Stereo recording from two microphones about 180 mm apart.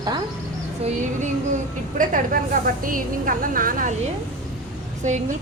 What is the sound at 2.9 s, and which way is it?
A woman's voice, 50° right (ahead or behind).